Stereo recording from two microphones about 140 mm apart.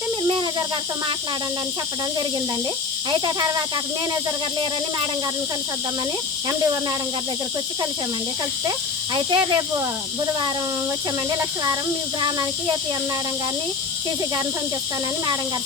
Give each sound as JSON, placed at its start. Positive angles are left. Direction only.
{"t": 9.1, "sound": "speech", "side_deg": -35}
{"t": 11.3, "sound": "speech", "side_deg": -25}